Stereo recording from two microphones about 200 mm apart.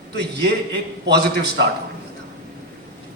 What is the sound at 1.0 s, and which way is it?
Speech, 55° right (ahead or behind).